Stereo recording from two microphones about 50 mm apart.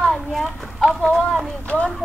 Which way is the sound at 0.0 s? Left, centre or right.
Centre.